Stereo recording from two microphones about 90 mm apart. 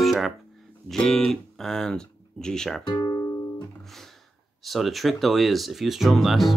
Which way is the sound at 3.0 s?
40° left (ahead or behind).